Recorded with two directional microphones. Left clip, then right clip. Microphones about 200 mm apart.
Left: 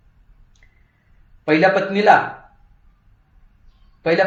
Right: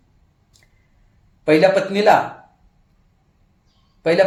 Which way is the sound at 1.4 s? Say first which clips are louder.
Right 1 dB; 30° right (ahead or behind).